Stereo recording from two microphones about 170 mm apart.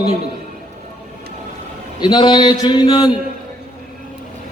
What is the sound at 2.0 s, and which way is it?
Speech, 25° left (ahead or behind).